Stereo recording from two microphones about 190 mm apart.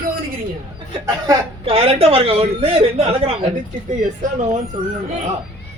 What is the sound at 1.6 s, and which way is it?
Speech, 30° right (ahead or behind).